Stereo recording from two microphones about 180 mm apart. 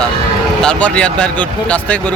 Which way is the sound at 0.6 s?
5° left (ahead or behind).